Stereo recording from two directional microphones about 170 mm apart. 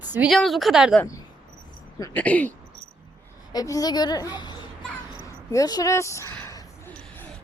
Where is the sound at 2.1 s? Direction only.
10° left (ahead or behind).